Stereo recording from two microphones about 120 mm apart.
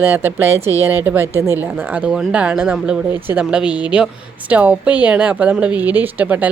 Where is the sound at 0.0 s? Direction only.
15° right (ahead or behind).